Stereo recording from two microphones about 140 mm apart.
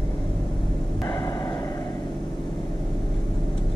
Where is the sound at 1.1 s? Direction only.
25° left (ahead or behind).